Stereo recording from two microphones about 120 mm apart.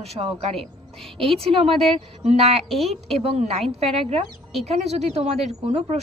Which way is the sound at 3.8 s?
55° right (ahead or behind).